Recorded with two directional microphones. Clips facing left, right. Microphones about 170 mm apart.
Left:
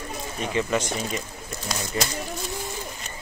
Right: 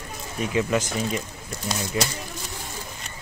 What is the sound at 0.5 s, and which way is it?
Speech, 5° right (ahead or behind).